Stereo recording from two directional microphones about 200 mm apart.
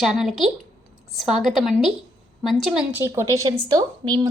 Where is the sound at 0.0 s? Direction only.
Centre (ahead or behind).